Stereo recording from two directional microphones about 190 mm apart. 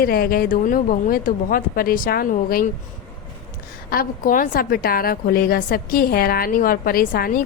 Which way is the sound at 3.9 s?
50° left (ahead or behind).